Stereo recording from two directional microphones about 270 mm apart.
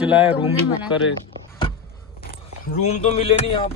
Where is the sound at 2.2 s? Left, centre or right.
Left.